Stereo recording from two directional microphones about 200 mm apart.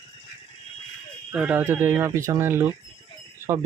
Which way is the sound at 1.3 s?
5° right (ahead or behind).